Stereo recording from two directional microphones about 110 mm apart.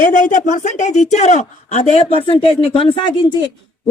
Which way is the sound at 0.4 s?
90° left.